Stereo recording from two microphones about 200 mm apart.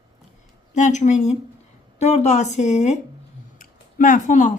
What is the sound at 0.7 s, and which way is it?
Speech, 35° left (ahead or behind).